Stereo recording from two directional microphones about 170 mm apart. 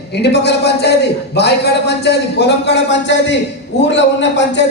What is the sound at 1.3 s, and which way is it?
A man's voice, 80° left.